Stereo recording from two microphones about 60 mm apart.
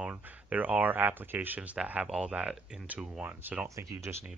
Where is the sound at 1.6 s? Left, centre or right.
Right.